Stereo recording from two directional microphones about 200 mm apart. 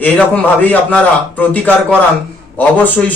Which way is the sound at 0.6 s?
10° left (ahead or behind).